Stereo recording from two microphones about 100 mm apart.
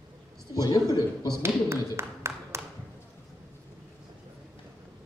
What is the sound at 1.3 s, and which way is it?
Speech, 25° right (ahead or behind).